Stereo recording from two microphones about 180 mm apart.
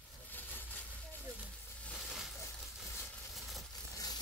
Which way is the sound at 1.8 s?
5° left (ahead or behind).